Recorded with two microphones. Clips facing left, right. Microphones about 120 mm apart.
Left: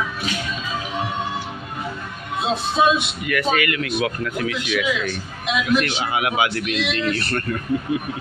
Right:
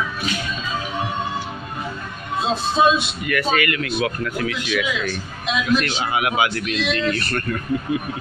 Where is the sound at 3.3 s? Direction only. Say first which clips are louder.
Even; 15° left (ahead or behind).